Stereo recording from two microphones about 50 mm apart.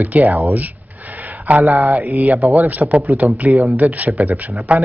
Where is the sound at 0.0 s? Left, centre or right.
Right.